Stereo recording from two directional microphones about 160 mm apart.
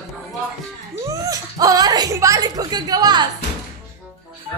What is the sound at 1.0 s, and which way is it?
Speech, 20° right (ahead or behind).